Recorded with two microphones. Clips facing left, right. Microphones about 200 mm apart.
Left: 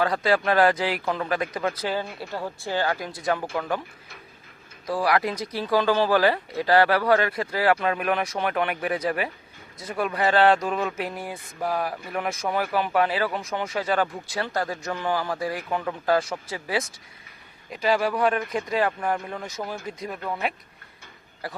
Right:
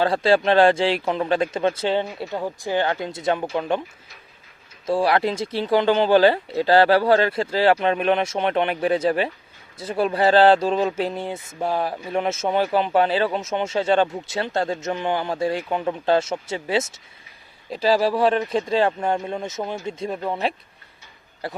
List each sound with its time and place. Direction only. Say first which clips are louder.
0.0 s speech: right 4 dB; 30° right (ahead or behind)
4.9 s speech: right 4 dB; 25° right (ahead or behind)